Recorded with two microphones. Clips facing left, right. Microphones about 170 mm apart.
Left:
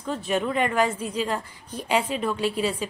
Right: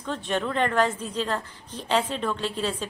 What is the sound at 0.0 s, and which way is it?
A woman's voice, 5° left (ahead or behind).